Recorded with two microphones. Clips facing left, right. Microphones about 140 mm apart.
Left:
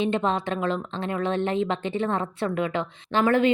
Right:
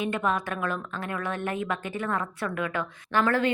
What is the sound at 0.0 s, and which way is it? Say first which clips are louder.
A woman's voice: left 3 dB; 25° left (ahead or behind).